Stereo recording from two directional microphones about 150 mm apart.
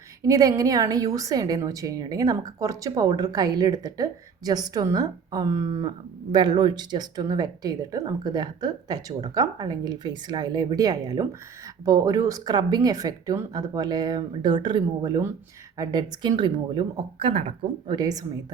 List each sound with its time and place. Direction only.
0.2 s a woman's voice: 20° right (ahead or behind)
17.8 s a woman's voice: 25° right (ahead or behind)